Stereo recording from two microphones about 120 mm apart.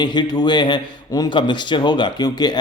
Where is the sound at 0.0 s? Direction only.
35° left (ahead or behind).